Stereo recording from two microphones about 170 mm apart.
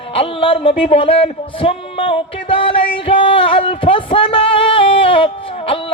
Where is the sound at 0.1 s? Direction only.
35° left (ahead or behind).